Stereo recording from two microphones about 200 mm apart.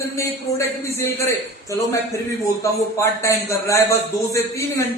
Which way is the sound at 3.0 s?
15° left (ahead or behind).